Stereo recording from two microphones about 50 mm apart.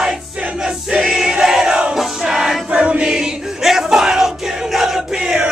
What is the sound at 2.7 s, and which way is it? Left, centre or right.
Choir, right.